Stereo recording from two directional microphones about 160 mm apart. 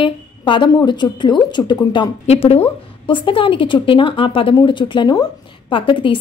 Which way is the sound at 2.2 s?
40° left (ahead or behind).